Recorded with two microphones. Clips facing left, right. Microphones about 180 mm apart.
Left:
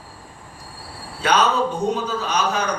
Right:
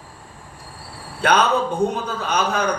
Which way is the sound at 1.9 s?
55° right (ahead or behind).